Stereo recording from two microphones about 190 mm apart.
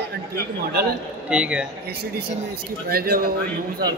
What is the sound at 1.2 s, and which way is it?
Speech, 5° right (ahead or behind).